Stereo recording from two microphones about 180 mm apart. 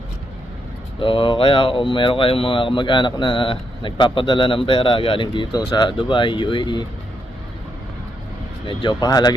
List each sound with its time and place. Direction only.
0.9 s speech: 30° left (ahead or behind)
8.6 s speech: 25° left (ahead or behind)